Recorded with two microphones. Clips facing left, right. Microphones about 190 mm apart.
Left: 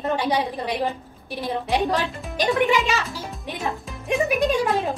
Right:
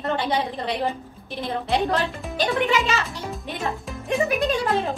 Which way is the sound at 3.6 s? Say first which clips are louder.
Even; centre (ahead or behind).